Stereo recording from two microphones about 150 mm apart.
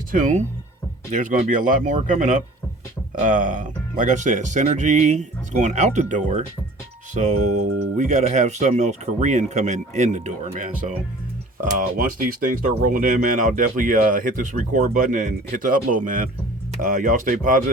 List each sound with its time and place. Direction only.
0.1 s speech: 55° right (ahead or behind)